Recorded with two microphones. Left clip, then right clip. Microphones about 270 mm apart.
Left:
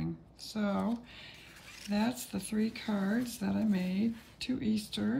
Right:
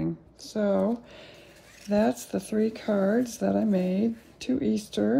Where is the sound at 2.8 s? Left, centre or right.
Centre.